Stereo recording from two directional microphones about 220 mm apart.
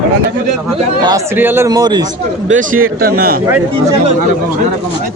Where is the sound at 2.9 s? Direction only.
45° right (ahead or behind).